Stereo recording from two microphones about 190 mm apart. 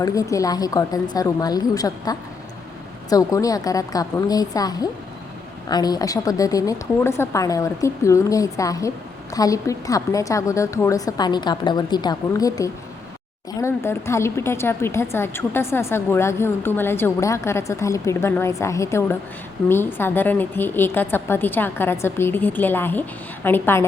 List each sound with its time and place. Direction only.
0.0 s a woman's voice: 15° left (ahead or behind)